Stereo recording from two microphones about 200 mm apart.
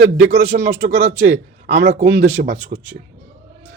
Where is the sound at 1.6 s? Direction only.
60° right (ahead or behind).